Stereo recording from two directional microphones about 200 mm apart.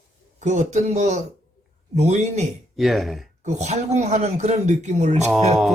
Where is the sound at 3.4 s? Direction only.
35° right (ahead or behind).